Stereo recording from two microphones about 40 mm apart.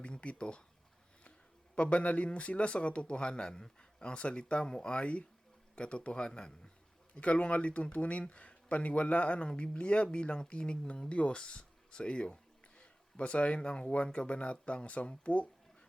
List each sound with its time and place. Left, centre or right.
0.0 s a man's voice: left
1.7 s a man's voice: left
4.9 s a man's voice: left
7.2 s a man's voice: left